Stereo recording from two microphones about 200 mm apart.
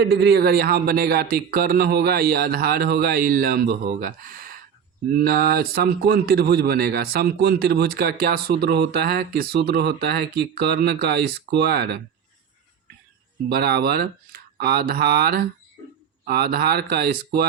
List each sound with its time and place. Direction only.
0.0 s speech: 55° right (ahead or behind)
13.5 s speech: 50° right (ahead or behind)